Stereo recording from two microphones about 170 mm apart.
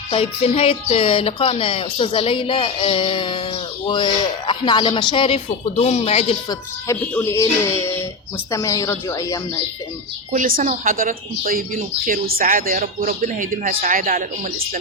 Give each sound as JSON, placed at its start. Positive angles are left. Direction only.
{"t": 0.1, "sound": "speech", "side_deg": 35}
{"t": 6.5, "sound": "a woman's voice", "side_deg": 15}
{"t": 10.3, "sound": "speech", "side_deg": -50}